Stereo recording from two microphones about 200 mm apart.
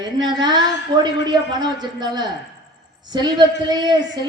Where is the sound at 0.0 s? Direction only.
20° right (ahead or behind).